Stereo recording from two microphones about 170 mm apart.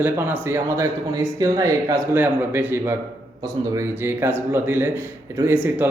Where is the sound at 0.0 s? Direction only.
10° right (ahead or behind).